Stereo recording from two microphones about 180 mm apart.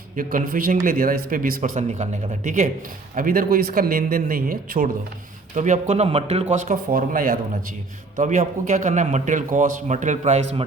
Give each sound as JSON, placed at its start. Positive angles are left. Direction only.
{"t": 0.2, "sound": "speech", "side_deg": -50}
{"t": 5.5, "sound": "speech", "side_deg": -40}